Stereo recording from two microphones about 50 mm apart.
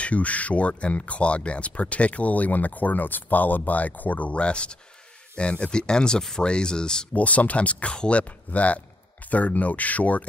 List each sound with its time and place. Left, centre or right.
0.0 s speech: left
7.2 s speech: left